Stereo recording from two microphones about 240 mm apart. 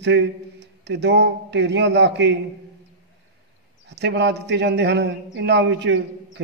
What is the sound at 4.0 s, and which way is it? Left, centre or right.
A man's voice, right.